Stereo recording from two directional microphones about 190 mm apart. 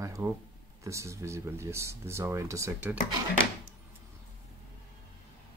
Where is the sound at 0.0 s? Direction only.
15° right (ahead or behind).